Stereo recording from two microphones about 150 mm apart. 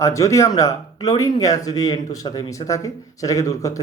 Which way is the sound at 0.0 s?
20° left (ahead or behind).